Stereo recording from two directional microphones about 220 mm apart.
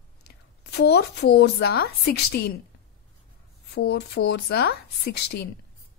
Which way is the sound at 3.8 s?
50° left (ahead or behind).